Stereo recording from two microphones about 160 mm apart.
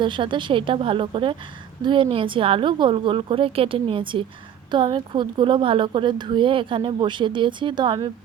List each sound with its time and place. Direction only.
0.0 s speech: 30° right (ahead or behind)